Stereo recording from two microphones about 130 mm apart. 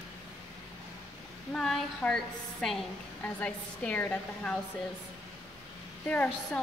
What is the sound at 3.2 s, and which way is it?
A woman's voice, 10° left (ahead or behind).